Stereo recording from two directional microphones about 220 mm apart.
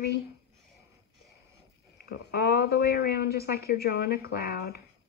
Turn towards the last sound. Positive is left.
turn(degrees=45)  # may be behind; listen again after turning